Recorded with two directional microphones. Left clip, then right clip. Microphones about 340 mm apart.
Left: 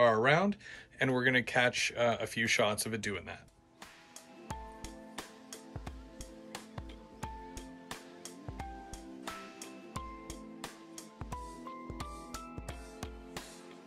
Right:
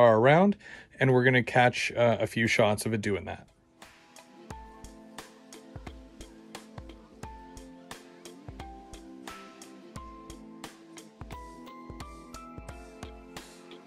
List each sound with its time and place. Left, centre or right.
0.0 s speech: centre
4.5 s music: centre